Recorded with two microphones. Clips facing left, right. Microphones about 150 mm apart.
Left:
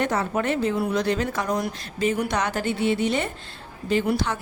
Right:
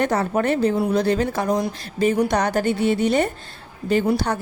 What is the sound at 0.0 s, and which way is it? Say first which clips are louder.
A woman's voice: right 4 dB; 40° right (ahead or behind).